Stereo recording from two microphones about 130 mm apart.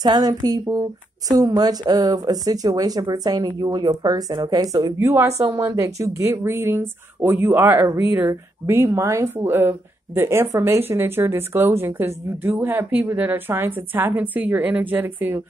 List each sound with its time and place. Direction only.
0.0 s speech: 30° right (ahead or behind)
4.9 s speech: 20° right (ahead or behind)